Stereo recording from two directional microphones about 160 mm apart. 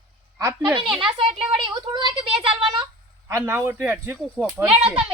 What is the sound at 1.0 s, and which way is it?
A woman's voice, 35° right (ahead or behind).